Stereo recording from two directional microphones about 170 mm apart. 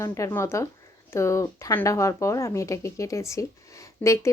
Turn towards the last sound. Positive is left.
turn(degrees=20)  # may be behind; listen again after turning